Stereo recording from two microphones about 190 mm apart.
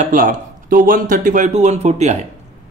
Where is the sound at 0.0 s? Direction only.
45° right (ahead or behind).